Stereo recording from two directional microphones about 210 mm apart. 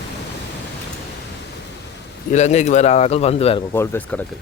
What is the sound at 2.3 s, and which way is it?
A man's voice, 35° left (ahead or behind).